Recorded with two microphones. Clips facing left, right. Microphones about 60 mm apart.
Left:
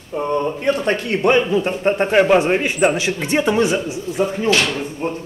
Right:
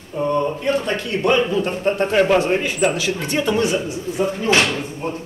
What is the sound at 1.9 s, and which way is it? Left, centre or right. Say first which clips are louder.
Speech: left 2 dB; left.